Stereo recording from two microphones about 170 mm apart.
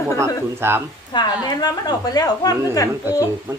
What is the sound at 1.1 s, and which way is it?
A woman's voice, 25° left (ahead or behind).